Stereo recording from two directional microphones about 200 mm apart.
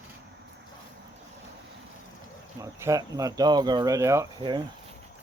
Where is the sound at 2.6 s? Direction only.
15° right (ahead or behind).